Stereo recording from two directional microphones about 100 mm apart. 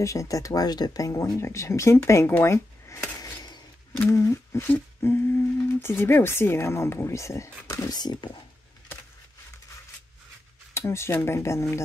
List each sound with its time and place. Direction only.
0.0 s speech: 30° left (ahead or behind)
7.9 s speech: 45° left (ahead or behind)
10.7 s speech: 25° left (ahead or behind)